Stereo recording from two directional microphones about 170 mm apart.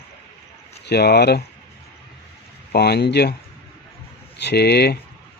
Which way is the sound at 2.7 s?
70° left (ahead or behind).